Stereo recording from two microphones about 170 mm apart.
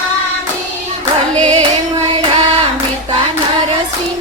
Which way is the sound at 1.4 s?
45° right (ahead or behind).